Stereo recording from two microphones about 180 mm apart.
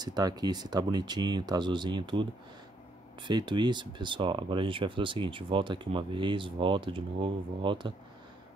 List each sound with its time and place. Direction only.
0.0 s speech: 20° right (ahead or behind)
3.3 s speech: 25° right (ahead or behind)